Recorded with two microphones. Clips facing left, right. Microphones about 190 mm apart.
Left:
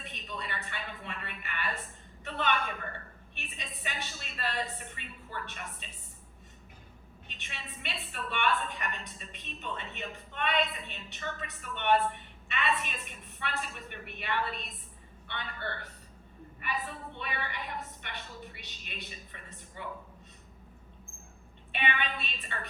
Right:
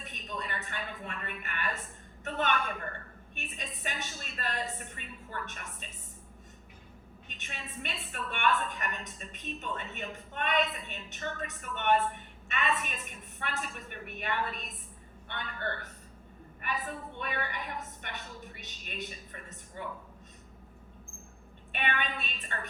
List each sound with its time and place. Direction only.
0.0 s a sound: 45° right (ahead or behind)
2.2 s a woman's voice: 45° right (ahead or behind)
7.3 s a woman's voice: 45° right (ahead or behind)
21.7 s a woman's voice: 45° right (ahead or behind)